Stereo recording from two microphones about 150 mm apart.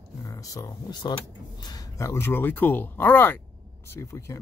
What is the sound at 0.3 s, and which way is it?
Speech, 20° left (ahead or behind).